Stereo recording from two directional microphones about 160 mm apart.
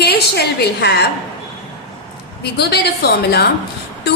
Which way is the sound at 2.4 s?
90° left.